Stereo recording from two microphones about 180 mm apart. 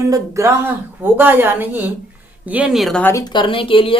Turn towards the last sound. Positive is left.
turn(degrees=30)  # may be behind; listen again after turning